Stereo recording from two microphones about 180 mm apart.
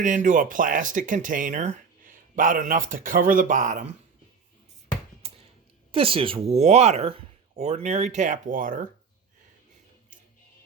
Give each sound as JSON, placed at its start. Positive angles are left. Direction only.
{"t": 0.0, "sound": "speech", "side_deg": -45}
{"t": 5.2, "sound": "a sound", "side_deg": -35}
{"t": 5.9, "sound": "speech", "side_deg": -30}